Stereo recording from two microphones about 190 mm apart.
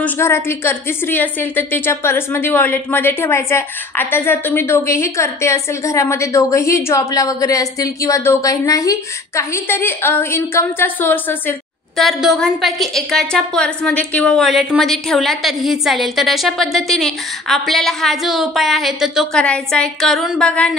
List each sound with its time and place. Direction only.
0.0 s a woman's voice: 10° left (ahead or behind)
12.0 s a woman's voice: centre (ahead or behind)